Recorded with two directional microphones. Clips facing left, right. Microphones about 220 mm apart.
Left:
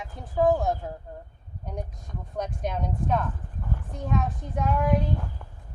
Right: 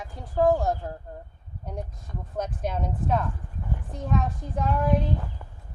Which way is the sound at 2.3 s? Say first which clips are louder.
Right 1 dB; 5° right (ahead or behind).